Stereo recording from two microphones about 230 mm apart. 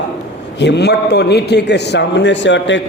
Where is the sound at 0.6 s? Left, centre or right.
Left.